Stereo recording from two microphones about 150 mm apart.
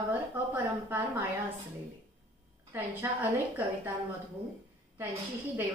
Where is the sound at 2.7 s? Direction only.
10° right (ahead or behind).